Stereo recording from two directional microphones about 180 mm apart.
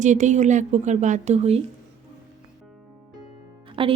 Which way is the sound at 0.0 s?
40° right (ahead or behind).